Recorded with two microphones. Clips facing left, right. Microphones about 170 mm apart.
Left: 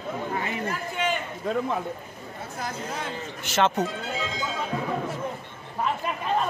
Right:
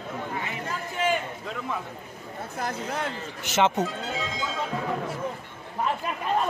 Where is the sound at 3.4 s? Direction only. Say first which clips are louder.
Even; 15° right (ahead or behind).